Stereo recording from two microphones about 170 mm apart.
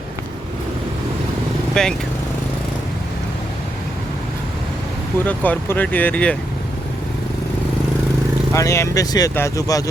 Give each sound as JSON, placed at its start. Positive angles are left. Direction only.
{"t": 1.7, "sound": "speech", "side_deg": 5}
{"t": 5.2, "sound": "speech", "side_deg": 10}
{"t": 8.5, "sound": "speech", "side_deg": 15}